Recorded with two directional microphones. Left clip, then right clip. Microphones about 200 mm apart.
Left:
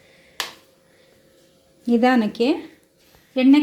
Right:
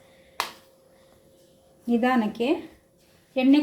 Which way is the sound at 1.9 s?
30° left (ahead or behind).